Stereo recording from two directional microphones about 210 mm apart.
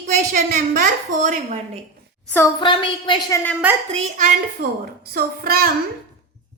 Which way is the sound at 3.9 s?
35° right (ahead or behind).